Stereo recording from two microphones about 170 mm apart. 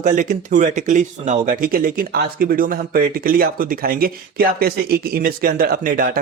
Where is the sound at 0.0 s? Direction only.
50° right (ahead or behind).